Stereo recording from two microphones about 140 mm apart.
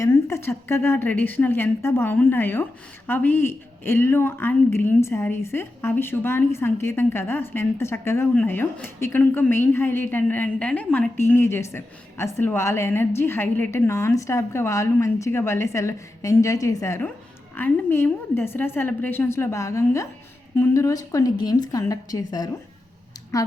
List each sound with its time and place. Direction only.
0.0 s a woman's voice: 20° left (ahead or behind)